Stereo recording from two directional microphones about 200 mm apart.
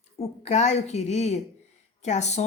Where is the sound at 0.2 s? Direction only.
35° left (ahead or behind).